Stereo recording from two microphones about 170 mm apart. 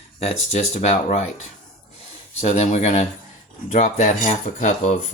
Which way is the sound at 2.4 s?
40° left (ahead or behind).